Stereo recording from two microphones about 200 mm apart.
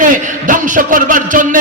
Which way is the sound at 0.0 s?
40° right (ahead or behind).